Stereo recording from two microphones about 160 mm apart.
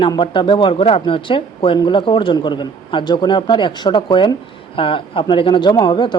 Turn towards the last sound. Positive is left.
turn(degrees=30)  # may be behind; listen again after turning